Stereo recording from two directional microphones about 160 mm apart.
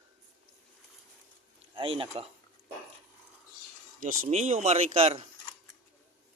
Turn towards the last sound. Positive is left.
turn(degrees=-35)  # may be behind; listen again after turning